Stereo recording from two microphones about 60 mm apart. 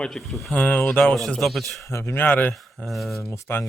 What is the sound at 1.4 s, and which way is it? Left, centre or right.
Speech, centre.